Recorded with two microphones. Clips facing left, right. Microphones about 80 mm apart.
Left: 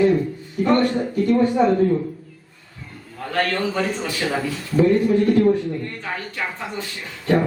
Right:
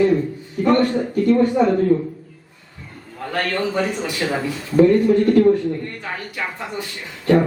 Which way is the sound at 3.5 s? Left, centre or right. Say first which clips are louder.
Right 1 dB; centre.